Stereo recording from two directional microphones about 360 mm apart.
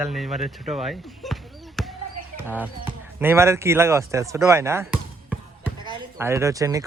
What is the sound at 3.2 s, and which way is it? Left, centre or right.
Speech, centre.